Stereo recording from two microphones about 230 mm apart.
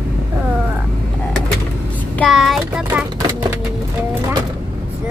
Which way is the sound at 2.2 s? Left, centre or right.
Centre.